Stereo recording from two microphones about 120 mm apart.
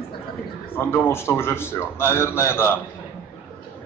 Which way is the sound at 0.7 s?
15° left (ahead or behind).